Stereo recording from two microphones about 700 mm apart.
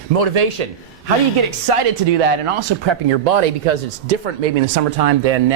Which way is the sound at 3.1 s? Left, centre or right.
Right.